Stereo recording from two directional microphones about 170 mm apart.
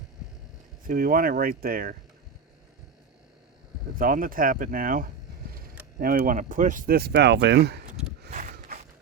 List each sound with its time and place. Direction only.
0.9 s speech: 55° right (ahead or behind)
3.9 s speech: 55° right (ahead or behind); by 7.8 s 75° right (ahead or behind)
8.3 s a sound: 50° right (ahead or behind)